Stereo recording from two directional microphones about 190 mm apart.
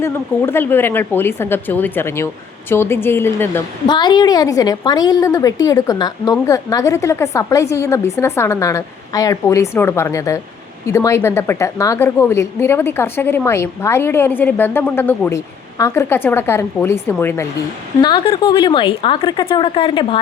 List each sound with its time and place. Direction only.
0.0 s a woman's voice: 10° left (ahead or behind)
3.8 s a woman's voice: 25° left (ahead or behind)
18.0 s a woman's voice: 25° left (ahead or behind)